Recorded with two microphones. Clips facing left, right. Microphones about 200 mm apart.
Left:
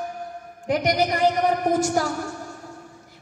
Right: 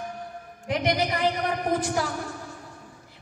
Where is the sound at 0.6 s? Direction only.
45° left (ahead or behind).